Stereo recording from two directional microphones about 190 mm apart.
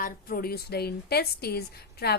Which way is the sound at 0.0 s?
50° left (ahead or behind).